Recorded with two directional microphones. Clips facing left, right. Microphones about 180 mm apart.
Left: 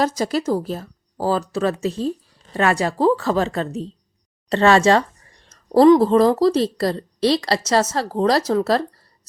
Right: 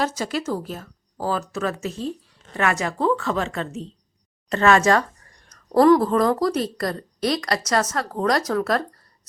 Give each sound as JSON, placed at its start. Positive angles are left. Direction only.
{"t": 0.0, "sound": "speech", "side_deg": 40}